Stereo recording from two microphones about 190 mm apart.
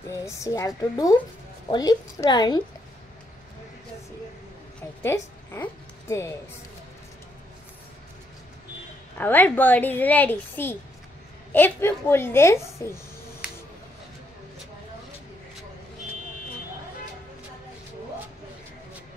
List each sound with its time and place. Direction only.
0.1 s a woman's voice: 15° left (ahead or behind)
5.0 s speech: 15° left (ahead or behind)
9.2 s a woman's voice: 10° left (ahead or behind)